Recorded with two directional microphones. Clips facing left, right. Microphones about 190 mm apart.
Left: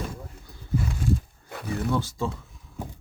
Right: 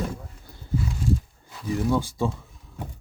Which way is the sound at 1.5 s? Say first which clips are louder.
Right 3 dB; 60° left (ahead or behind).